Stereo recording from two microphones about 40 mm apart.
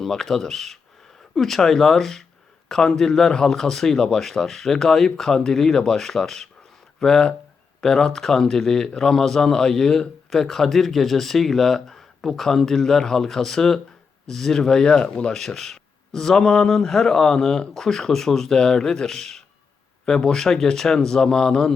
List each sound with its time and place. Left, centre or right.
0.0 s speech: centre